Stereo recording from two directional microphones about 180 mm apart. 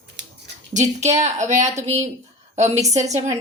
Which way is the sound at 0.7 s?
40° right (ahead or behind).